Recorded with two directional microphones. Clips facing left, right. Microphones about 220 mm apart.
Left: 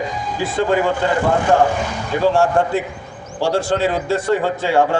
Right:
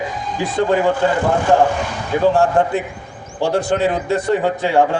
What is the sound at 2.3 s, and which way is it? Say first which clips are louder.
A man's voice: even; 20° right (ahead or behind).